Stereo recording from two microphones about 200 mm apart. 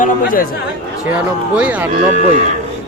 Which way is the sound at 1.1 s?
5° right (ahead or behind).